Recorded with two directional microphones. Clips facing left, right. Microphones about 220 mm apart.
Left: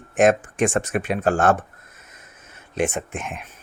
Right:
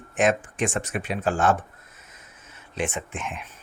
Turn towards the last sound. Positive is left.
turn(degrees=50)  # may be behind; listen again after turning